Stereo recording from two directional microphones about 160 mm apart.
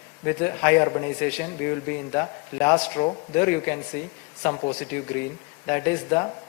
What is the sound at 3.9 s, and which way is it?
Speech, 10° left (ahead or behind).